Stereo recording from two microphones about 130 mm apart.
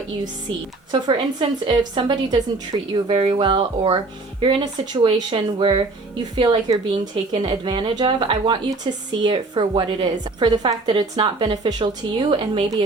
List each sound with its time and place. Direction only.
0.9 s a woman's voice: 35° right (ahead or behind)
2.9 s a woman's voice: 50° right (ahead or behind)